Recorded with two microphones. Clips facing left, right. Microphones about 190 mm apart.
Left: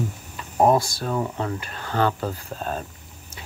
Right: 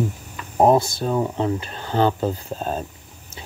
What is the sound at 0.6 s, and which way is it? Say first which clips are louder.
Speech: right 3 dB; 20° right (ahead or behind).